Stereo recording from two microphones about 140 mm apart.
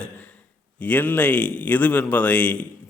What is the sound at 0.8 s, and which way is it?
A man's voice, 10° left (ahead or behind).